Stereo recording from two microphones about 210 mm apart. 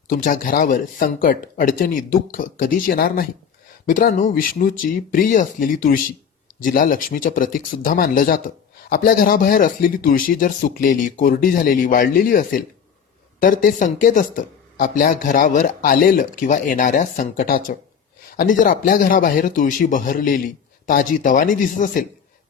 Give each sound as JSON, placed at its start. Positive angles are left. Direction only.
{"t": 0.1, "sound": "speech", "side_deg": 40}